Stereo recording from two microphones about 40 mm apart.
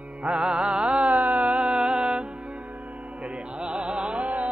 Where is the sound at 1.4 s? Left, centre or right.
Right.